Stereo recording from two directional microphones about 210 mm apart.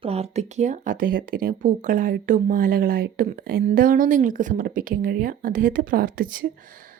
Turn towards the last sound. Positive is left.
turn(degrees=-40)  # may be behind; listen again after turning